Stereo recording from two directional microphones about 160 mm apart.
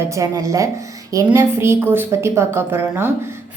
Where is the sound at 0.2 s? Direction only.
20° right (ahead or behind).